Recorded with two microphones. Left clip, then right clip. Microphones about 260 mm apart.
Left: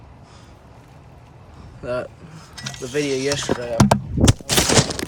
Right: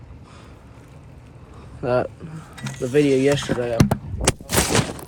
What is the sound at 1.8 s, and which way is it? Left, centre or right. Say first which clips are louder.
Speech: right 5 dB; centre.